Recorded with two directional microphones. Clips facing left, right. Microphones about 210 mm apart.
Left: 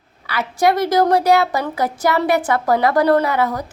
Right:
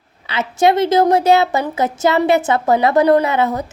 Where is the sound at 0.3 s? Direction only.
25° right (ahead or behind).